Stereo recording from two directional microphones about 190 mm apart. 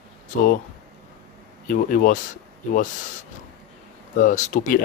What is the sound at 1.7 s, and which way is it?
Speech, 45° left (ahead or behind).